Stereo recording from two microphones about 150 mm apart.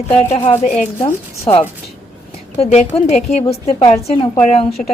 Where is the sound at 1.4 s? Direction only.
40° left (ahead or behind).